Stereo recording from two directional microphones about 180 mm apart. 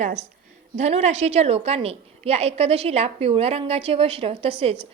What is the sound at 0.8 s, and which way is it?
A woman's voice, 35° right (ahead or behind).